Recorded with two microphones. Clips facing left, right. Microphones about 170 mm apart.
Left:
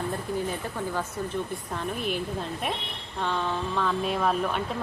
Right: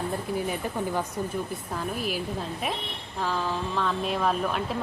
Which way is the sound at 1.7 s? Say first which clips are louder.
Even; 5° right (ahead or behind).